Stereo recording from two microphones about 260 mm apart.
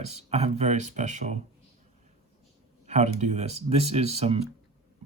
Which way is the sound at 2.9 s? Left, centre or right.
Right.